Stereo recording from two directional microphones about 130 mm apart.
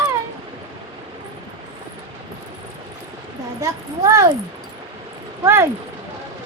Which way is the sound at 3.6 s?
25° right (ahead or behind).